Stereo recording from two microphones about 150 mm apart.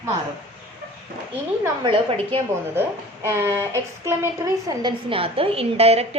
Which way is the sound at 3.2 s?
20° right (ahead or behind).